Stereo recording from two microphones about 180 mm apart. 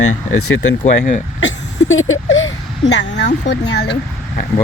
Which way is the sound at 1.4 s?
90° left.